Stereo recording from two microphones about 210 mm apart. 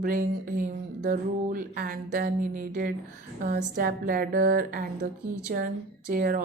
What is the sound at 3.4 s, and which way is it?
Speech, 50° right (ahead or behind).